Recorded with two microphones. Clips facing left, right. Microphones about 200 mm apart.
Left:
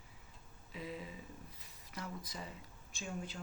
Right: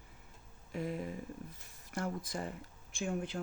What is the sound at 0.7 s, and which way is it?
Speech, 55° right (ahead or behind).